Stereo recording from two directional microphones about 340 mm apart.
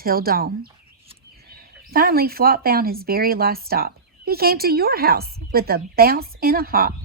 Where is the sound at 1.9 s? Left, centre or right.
Right.